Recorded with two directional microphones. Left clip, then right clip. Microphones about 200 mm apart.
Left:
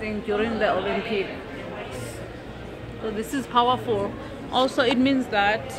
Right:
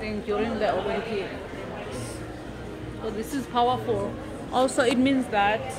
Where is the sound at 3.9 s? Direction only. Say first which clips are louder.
Left 2 dB; 25° left (ahead or behind).